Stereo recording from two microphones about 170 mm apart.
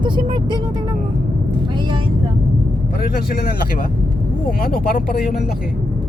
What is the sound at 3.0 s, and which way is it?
Speech, 60° left (ahead or behind).